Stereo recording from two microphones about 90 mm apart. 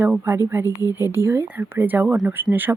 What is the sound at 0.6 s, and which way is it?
Speech, 40° left (ahead or behind).